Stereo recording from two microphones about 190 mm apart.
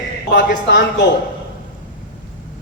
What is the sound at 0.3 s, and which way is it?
Speech, 65° left (ahead or behind).